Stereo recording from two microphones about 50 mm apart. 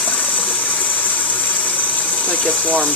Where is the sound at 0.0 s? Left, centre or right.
Left.